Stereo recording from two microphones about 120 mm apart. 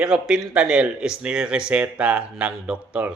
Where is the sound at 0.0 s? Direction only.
5° right (ahead or behind).